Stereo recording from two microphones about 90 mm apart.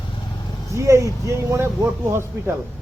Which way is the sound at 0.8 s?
35° right (ahead or behind).